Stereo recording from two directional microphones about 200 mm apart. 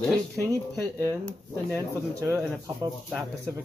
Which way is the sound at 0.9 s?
5° left (ahead or behind).